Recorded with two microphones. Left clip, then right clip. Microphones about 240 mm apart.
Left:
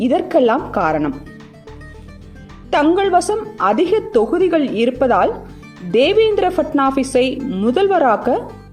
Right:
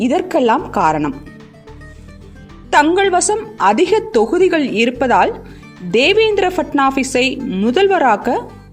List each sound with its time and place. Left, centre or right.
0.0 s a woman's voice: right
2.6 s a woman's voice: right